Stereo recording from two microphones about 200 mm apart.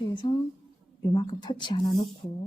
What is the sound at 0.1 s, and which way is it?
Speech, 25° left (ahead or behind).